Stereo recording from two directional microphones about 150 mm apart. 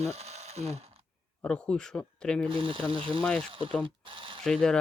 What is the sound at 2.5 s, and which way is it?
Speech, 35° right (ahead or behind).